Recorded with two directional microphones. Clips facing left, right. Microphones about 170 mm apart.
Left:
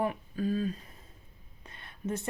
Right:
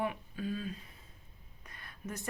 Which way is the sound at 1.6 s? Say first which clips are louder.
Left 7 dB; 25° left (ahead or behind).